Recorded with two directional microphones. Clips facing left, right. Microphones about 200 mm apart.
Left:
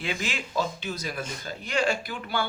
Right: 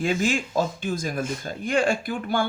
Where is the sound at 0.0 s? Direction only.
45° right (ahead or behind).